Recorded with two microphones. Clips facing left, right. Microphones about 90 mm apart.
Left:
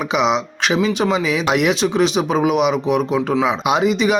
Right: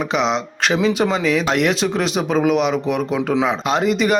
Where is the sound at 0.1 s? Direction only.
5° left (ahead or behind).